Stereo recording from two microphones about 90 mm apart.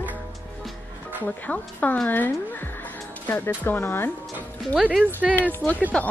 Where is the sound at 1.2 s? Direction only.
15° left (ahead or behind).